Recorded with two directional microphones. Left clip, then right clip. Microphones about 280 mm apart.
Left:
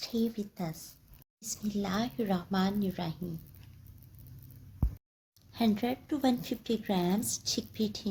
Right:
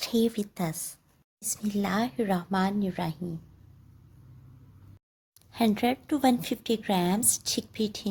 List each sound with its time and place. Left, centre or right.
0.0 s a woman's voice: right
5.5 s a woman's voice: right